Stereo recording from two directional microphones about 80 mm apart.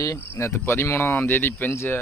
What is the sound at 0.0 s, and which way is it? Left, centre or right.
Speech, left.